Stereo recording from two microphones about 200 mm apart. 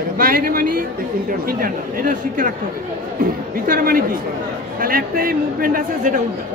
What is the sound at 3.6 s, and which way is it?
Speech, 45° right (ahead or behind).